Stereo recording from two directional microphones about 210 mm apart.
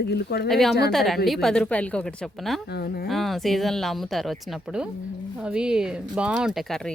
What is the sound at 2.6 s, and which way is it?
Speech, 50° left (ahead or behind).